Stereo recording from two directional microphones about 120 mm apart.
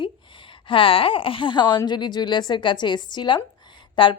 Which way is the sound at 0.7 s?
50° left (ahead or behind).